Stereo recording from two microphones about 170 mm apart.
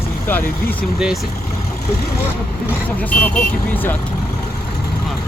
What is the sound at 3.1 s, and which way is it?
Speech, 10° left (ahead or behind).